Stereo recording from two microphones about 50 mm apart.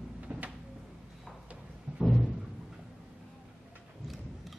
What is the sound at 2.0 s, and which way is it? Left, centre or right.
Timpani, centre.